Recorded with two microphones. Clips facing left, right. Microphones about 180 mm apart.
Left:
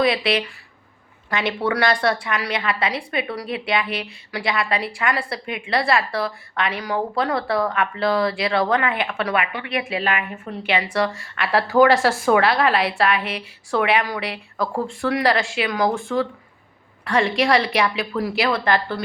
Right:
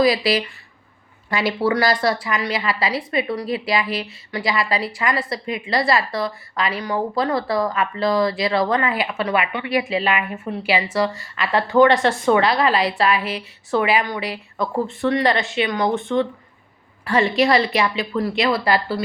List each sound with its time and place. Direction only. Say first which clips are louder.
0.0 s a woman's voice: right 2 dB; centre (ahead or behind)
9.4 s speech: right 3 dB; 25° right (ahead or behind)
10.6 s a woman's voice: right 1 dB; 5° right (ahead or behind)